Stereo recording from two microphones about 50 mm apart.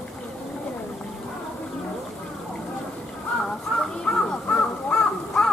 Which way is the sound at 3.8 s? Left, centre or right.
Centre.